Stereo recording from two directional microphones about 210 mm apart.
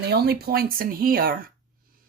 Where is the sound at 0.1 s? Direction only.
50° right (ahead or behind).